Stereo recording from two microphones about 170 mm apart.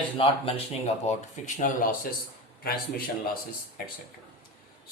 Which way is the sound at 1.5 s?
50° left (ahead or behind).